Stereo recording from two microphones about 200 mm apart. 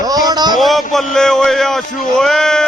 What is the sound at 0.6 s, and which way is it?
Speech, centre (ahead or behind).